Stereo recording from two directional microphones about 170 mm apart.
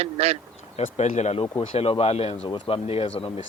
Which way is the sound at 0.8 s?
45° left (ahead or behind).